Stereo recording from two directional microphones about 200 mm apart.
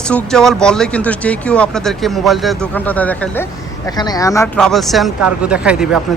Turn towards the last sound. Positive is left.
turn(degrees=-5)  # may be behind; listen again after turning